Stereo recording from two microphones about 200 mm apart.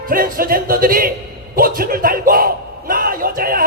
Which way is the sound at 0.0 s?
45° right (ahead or behind).